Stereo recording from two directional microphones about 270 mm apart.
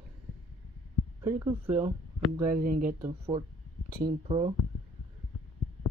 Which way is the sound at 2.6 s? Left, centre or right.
Right.